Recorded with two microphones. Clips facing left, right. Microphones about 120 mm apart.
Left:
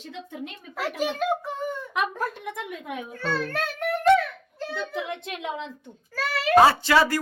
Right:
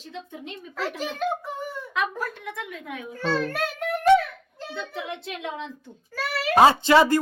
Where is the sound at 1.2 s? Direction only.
Centre (ahead or behind).